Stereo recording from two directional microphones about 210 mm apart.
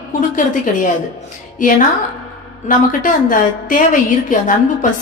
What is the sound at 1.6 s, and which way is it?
A woman's voice, 40° left (ahead or behind).